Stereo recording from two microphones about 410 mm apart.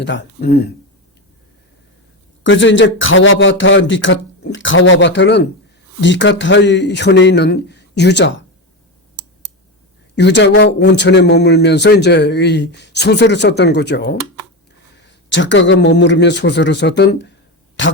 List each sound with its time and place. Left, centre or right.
0.0 s a man's voice: left
2.4 s a man's voice: left
10.2 s a man's voice: left
15.3 s a man's voice: left